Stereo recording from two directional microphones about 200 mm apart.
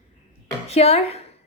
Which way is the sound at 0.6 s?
30° left (ahead or behind).